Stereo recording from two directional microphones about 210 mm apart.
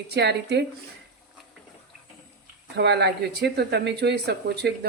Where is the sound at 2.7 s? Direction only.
55° right (ahead or behind).